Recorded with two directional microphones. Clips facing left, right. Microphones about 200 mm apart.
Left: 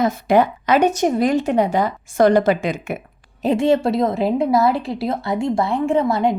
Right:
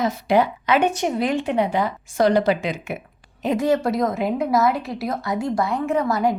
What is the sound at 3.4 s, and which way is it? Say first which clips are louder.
A woman's voice: left 3 dB; 25° left (ahead or behind).